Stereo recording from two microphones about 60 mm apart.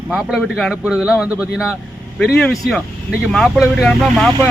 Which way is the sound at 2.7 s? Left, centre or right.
Centre.